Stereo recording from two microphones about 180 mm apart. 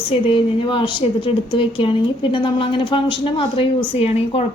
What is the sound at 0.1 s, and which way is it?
A woman's voice, 30° left (ahead or behind).